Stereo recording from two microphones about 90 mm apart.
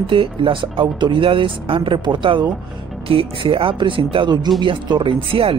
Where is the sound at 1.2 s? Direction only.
80° right; by 2.4 s 65° right (ahead or behind).